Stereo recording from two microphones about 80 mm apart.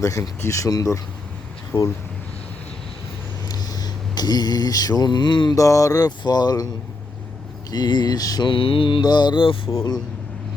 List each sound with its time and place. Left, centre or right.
0.0 s a sound: left
1.7 s speech: left
3.5 s mantra: left
5.5 s a sound: left
7.7 s speech: left
8.4 s mantra: left